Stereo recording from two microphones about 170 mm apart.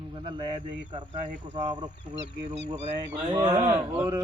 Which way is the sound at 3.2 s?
30° right (ahead or behind).